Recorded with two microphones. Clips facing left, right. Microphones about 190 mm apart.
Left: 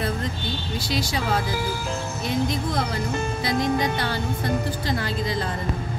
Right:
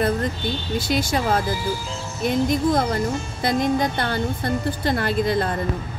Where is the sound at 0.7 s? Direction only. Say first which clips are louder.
Right 5 dB; 50° right (ahead or behind).